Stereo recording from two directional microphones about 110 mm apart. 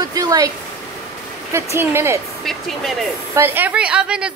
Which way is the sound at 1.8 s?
25° right (ahead or behind).